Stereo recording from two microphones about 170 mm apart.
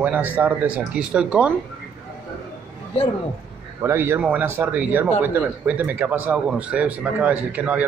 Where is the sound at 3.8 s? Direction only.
15° right (ahead or behind).